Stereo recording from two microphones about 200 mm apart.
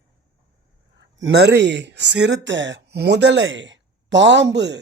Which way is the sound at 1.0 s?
60° right (ahead or behind).